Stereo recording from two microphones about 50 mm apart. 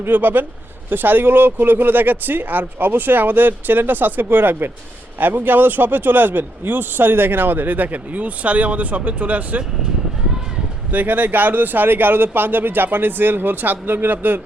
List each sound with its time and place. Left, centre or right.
0.0 s speech: right
10.9 s speech: right